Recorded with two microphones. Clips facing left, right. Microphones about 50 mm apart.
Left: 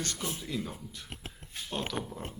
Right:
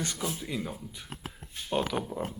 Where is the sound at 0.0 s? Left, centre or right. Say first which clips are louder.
Right 3 dB; centre.